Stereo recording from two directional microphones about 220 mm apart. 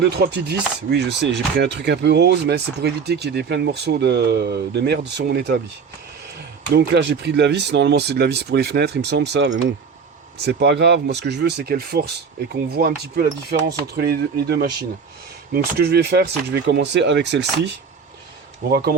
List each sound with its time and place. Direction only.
0.0 s speech: 50° right (ahead or behind)
6.7 s speech: 50° right (ahead or behind)
18.7 s speech: 45° right (ahead or behind)